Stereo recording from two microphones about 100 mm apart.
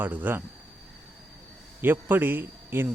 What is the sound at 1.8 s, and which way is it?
A man's voice, 20° right (ahead or behind).